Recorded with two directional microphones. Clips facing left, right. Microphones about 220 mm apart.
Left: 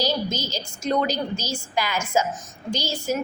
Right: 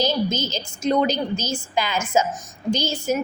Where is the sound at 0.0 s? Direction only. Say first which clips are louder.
Right 3 dB; 20° right (ahead or behind).